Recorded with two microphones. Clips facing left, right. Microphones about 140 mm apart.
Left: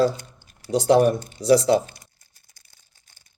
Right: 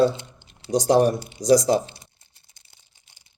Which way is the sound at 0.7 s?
35° right (ahead or behind).